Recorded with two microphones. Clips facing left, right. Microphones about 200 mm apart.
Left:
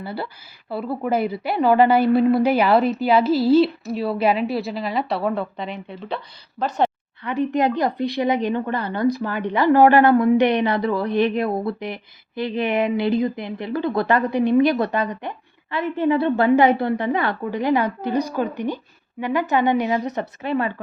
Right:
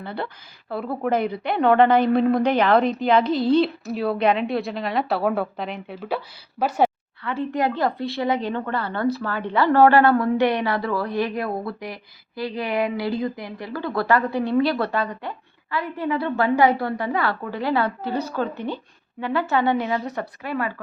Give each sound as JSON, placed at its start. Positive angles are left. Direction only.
{"t": 0.0, "sound": "a woman's voice", "side_deg": 5}
{"t": 7.3, "sound": "a woman's voice", "side_deg": 20}